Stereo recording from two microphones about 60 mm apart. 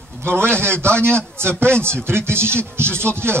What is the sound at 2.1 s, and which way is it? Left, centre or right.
Speech, right.